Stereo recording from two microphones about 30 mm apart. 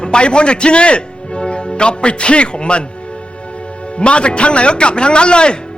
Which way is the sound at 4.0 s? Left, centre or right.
Left.